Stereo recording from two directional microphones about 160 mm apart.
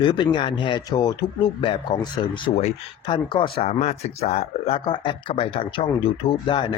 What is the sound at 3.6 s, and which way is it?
Speech, 45° left (ahead or behind).